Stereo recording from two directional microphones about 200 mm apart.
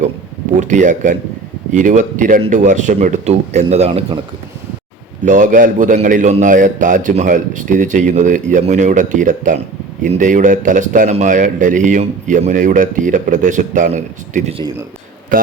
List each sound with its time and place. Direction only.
0.6 s a man's voice: 40° right (ahead or behind)
5.2 s a man's voice: 40° right (ahead or behind)